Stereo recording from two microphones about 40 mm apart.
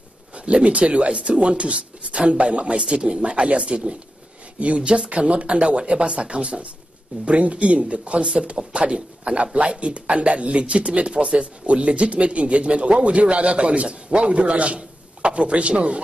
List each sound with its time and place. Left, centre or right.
0.3 s a man's voice: right